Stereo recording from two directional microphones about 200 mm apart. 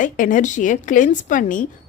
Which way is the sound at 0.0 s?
40° left (ahead or behind).